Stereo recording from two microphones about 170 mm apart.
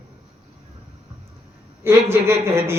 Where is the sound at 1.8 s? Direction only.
15° right (ahead or behind).